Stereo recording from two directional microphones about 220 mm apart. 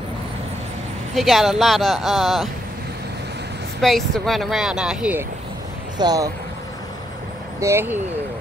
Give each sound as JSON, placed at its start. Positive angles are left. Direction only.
{"t": 1.1, "sound": "speech", "side_deg": 0}
{"t": 3.8, "sound": "speech", "side_deg": 0}
{"t": 5.9, "sound": "speech", "side_deg": -15}
{"t": 7.6, "sound": "speech", "side_deg": -10}